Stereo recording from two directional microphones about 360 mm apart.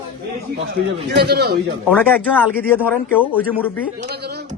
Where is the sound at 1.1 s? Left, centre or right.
Right.